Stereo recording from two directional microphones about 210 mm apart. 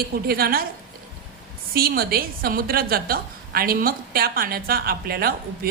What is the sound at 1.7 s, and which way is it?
A woman's voice, 45° right (ahead or behind).